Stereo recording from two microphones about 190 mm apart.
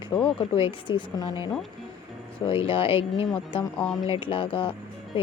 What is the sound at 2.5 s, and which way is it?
Speech, 30° left (ahead or behind).